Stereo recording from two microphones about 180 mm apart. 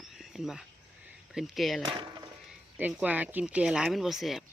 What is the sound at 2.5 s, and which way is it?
Speech, 10° right (ahead or behind).